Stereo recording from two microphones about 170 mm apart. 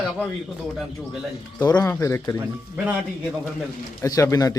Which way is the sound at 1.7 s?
20° left (ahead or behind).